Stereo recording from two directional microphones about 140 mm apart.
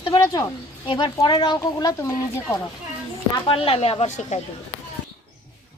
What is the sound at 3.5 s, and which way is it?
Speech, 40° left (ahead or behind).